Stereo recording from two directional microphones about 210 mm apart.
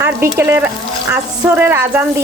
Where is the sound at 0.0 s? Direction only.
10° right (ahead or behind).